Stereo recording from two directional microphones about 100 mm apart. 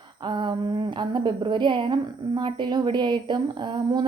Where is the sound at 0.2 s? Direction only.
50° right (ahead or behind).